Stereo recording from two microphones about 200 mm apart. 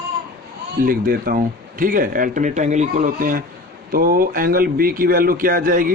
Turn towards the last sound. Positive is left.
turn(degrees=-45)  # may be behind; listen again after turning